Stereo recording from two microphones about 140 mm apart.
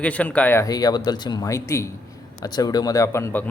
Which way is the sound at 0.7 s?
30° left (ahead or behind).